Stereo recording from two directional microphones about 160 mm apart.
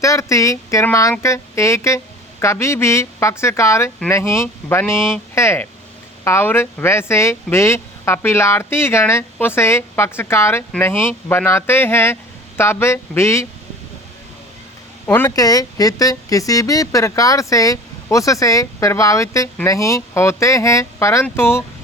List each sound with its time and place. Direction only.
0.0 s speech: 20° left (ahead or behind)
15.0 s speech: 15° left (ahead or behind)